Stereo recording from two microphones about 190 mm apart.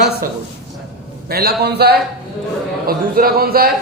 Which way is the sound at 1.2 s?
55° right (ahead or behind).